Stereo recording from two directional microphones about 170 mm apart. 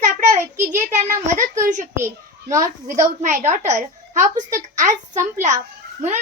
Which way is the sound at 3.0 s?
45° right (ahead or behind).